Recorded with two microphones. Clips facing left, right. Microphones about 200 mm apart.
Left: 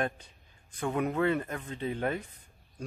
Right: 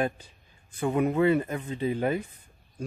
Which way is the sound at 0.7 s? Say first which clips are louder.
Right 5 dB; 5° right (ahead or behind).